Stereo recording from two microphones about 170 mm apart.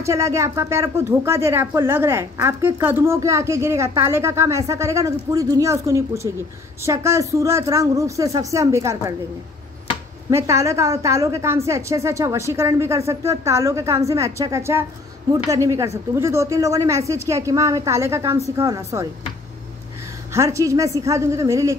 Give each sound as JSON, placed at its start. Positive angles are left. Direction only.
{"t": 0.0, "sound": "speech", "side_deg": -15}
{"t": 10.3, "sound": "speech", "side_deg": -15}
{"t": 20.3, "sound": "speech", "side_deg": -15}